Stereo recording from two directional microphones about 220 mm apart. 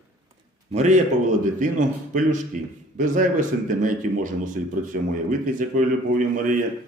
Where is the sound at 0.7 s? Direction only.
30° right (ahead or behind).